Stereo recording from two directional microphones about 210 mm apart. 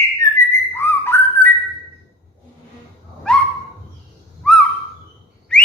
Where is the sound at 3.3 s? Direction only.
5° left (ahead or behind).